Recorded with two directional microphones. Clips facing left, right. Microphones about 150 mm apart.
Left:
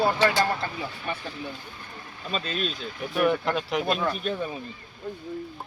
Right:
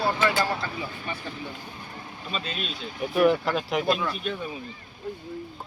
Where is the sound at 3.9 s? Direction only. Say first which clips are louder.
Left 2 dB; 45° left (ahead or behind).